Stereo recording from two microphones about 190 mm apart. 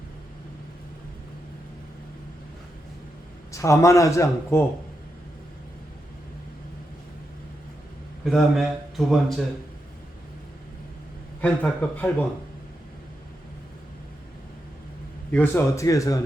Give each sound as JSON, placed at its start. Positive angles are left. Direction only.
{"t": 3.5, "sound": "a man's voice", "side_deg": 15}
{"t": 8.2, "sound": "a man's voice", "side_deg": 0}
{"t": 11.3, "sound": "a man's voice", "side_deg": 10}
{"t": 15.3, "sound": "a man's voice", "side_deg": 10}